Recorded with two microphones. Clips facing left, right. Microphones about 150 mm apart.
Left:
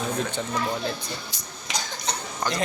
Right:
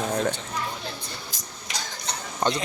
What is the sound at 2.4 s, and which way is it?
Speech, 25° right (ahead or behind).